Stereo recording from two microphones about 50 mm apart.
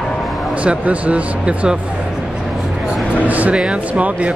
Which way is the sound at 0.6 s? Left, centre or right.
Right.